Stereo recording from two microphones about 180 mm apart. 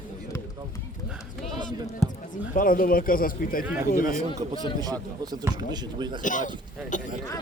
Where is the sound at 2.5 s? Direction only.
50° left (ahead or behind).